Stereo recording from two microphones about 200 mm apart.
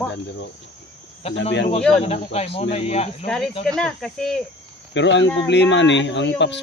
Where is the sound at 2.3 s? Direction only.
30° left (ahead or behind).